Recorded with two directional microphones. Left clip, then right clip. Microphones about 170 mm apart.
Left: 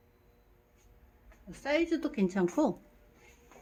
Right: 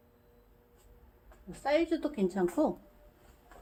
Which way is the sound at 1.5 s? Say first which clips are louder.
Right 1 dB; 15° left (ahead or behind).